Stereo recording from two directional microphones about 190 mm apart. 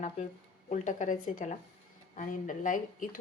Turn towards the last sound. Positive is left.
turn(degrees=45)  # may be behind; listen again after turning